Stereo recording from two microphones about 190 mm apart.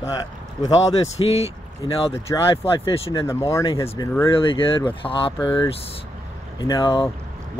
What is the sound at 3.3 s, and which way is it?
Speech, 15° left (ahead or behind).